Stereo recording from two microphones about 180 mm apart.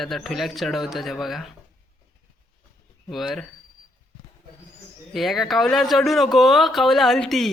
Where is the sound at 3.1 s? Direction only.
Centre (ahead or behind).